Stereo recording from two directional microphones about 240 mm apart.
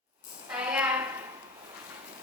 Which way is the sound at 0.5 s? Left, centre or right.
Centre.